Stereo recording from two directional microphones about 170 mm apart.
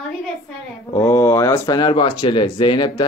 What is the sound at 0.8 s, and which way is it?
Speech, 20° left (ahead or behind).